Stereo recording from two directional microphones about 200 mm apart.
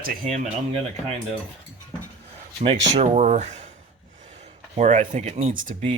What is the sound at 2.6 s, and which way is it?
Speech, 35° right (ahead or behind).